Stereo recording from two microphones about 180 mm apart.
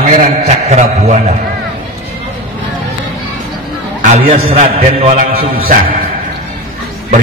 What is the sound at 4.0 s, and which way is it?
A man's voice, 35° right (ahead or behind).